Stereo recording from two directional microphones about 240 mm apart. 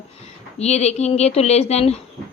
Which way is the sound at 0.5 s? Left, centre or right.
Left.